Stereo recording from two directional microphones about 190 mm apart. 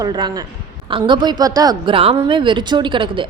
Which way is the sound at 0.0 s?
25° right (ahead or behind).